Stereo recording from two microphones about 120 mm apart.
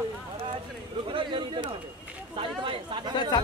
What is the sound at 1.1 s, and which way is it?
Speech, 45° right (ahead or behind).